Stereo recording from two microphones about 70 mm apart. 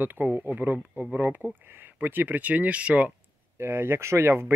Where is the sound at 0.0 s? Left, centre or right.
Right.